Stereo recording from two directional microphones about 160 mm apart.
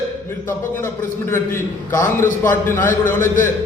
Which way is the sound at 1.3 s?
15° left (ahead or behind).